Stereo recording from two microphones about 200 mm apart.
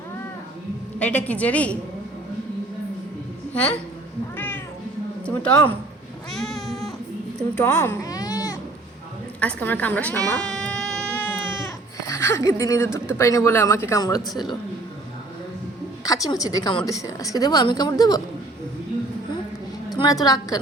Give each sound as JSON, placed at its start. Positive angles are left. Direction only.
{"t": 0.9, "sound": "speech", "side_deg": 5}
{"t": 3.5, "sound": "a woman's voice", "side_deg": 5}
{"t": 4.4, "sound": "cat", "side_deg": 10}
{"t": 5.2, "sound": "a man's voice", "side_deg": 5}
{"t": 6.3, "sound": "cat", "side_deg": 0}
{"t": 7.5, "sound": "cat", "side_deg": 10}
{"t": 9.4, "sound": "baby cry", "side_deg": 5}
{"t": 12.0, "sound": "speech", "side_deg": 15}
{"t": 16.0, "sound": "a woman's voice", "side_deg": 15}
{"t": 19.9, "sound": "a woman's voice", "side_deg": 20}